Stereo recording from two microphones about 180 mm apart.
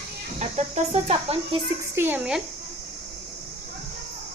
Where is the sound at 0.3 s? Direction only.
40° right (ahead or behind).